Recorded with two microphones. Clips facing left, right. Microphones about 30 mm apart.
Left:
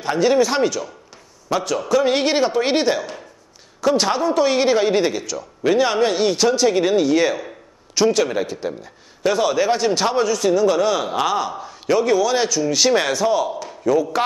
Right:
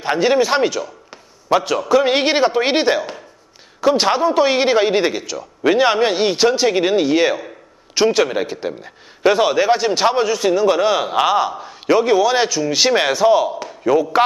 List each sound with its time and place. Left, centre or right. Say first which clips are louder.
0.0 s a man's voice: right 1 dB; right